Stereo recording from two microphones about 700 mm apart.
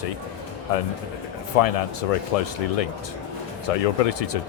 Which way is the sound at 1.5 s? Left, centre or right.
Left.